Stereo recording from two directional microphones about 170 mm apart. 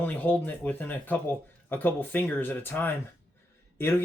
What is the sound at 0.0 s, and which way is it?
Speech, 10° left (ahead or behind).